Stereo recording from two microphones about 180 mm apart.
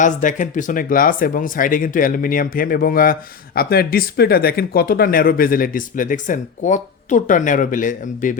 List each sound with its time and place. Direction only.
0.0 s speech: 45° left (ahead or behind)